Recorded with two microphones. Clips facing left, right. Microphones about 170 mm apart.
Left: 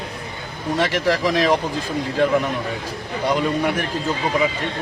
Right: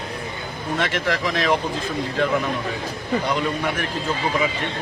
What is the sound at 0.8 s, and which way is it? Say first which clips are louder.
Speech: left 4 dB; 40° left (ahead or behind).